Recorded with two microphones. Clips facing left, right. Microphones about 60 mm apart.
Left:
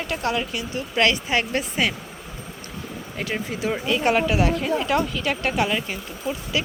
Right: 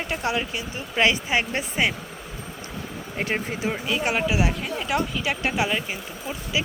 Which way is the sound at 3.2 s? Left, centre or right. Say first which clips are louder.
Right 1 dB; right.